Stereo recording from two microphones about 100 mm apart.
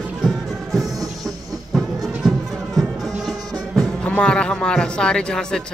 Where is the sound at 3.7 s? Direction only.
10° left (ahead or behind).